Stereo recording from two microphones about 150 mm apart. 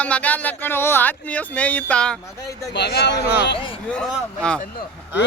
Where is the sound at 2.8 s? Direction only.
90° left.